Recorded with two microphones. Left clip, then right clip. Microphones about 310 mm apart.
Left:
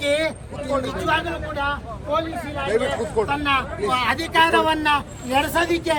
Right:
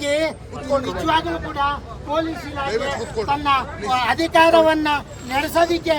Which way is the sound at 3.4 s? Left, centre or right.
Right.